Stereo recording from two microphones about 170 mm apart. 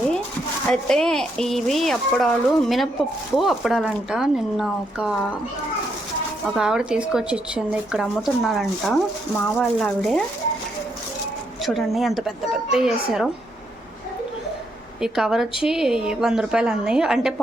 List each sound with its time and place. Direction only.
0.7 s speech: 5° left (ahead or behind)
6.4 s speech: 5° right (ahead or behind)
11.6 s speech: centre (ahead or behind)
15.0 s speech: 5° right (ahead or behind)